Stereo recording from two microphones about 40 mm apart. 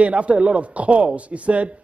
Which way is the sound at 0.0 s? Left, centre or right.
Right.